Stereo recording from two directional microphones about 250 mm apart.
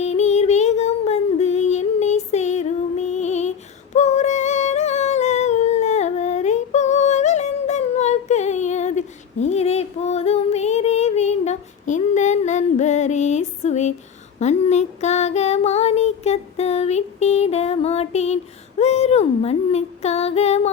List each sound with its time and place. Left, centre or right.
0.0 s music: left
3.9 s humming: left
14.3 s female singing: left